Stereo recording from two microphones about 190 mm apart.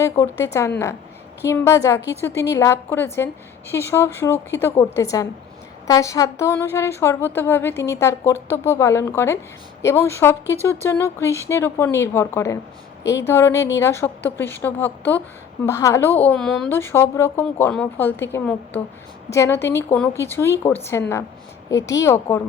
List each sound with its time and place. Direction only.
0.0 s speech: 15° left (ahead or behind)
16.7 s speech: 10° left (ahead or behind)